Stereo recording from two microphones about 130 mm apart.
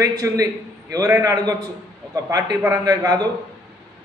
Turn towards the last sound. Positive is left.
turn(degrees=-30)  # may be behind; listen again after turning